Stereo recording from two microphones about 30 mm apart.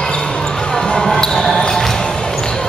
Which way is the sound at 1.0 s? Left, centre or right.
Centre.